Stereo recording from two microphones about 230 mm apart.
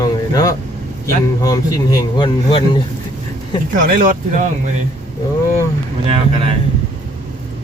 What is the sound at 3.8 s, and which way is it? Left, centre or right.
Speech, right.